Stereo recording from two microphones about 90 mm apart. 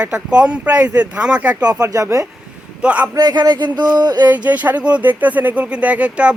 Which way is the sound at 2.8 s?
15° right (ahead or behind).